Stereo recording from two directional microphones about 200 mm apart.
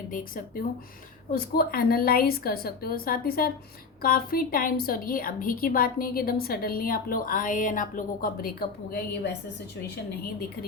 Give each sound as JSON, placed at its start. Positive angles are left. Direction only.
{"t": 0.1, "sound": "a woman's voice", "side_deg": 45}